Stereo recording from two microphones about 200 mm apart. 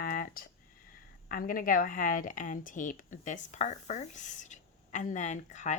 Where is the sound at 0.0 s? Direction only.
45° left (ahead or behind).